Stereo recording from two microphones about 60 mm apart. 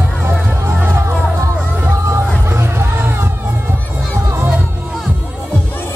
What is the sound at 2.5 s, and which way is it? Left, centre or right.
Music, right.